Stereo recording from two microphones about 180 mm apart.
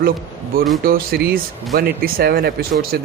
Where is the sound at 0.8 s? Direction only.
55° right (ahead or behind).